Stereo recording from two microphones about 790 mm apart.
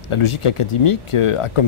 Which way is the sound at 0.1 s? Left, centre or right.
Left.